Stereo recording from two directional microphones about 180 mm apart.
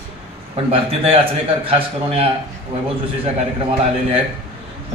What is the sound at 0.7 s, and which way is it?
A man's voice, 30° right (ahead or behind).